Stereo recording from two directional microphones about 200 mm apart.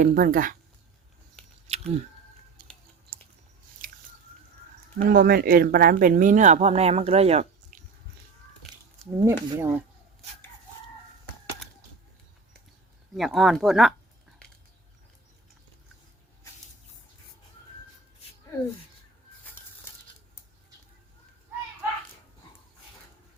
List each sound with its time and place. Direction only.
0.0 s speech: 40° right (ahead or behind)
1.7 s a sound: 30° right (ahead or behind)
2.6 s chewing: 45° right (ahead or behind)
3.8 s squish: 45° right (ahead or behind)
4.9 s speech: 50° right (ahead or behind); by 7.8 s 30° right (ahead or behind)
9.2 s speech: 15° right (ahead or behind)
13.1 s speech: centre (ahead or behind)
19.9 s scissors: 10° left (ahead or behind)